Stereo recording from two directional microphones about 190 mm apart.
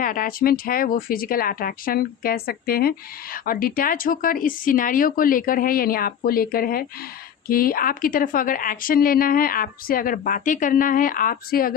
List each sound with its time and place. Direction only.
0.0 s a woman's voice: 45° left (ahead or behind)